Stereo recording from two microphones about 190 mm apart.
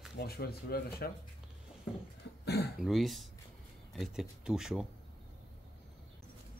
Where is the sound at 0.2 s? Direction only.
55° left (ahead or behind).